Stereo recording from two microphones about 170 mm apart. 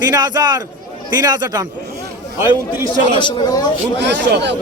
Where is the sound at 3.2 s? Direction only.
25° left (ahead or behind).